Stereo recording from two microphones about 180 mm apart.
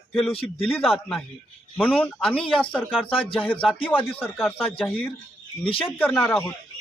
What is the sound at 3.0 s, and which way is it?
Speech, 30° left (ahead or behind).